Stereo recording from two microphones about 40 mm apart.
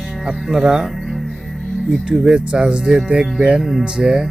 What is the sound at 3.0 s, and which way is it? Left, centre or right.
Speech, right.